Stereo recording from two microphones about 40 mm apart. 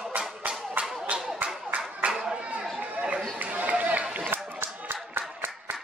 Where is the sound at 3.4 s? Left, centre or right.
Right.